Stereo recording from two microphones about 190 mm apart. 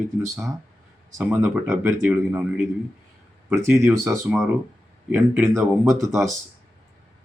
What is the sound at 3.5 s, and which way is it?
Speech, 15° right (ahead or behind).